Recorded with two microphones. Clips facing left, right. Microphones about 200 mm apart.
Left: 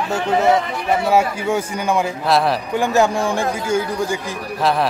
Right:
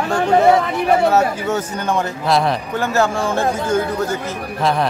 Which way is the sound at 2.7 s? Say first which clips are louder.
Left 3 dB; 15° left (ahead or behind).